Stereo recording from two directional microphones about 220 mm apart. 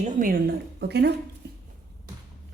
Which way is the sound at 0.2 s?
40° right (ahead or behind).